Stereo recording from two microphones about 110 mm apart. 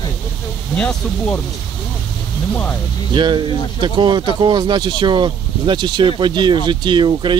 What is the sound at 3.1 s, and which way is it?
Speech, 45° right (ahead or behind).